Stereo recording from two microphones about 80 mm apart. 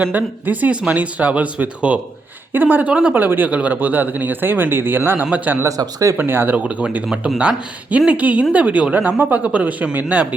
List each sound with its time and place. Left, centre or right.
0.0 s speech: right
5.6 s speech: right
6.1 s speech: right